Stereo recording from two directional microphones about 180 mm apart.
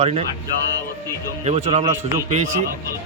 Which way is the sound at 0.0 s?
35° right (ahead or behind).